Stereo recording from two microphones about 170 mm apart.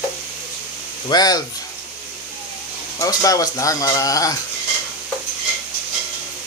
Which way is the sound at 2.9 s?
20° left (ahead or behind).